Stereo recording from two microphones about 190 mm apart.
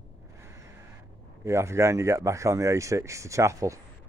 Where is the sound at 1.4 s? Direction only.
15° right (ahead or behind).